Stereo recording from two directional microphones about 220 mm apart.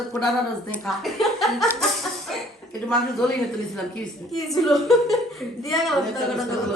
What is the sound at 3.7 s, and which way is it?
A woman's voice, centre (ahead or behind).